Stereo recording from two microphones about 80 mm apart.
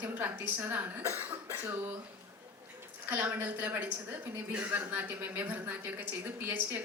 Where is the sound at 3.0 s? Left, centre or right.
Right.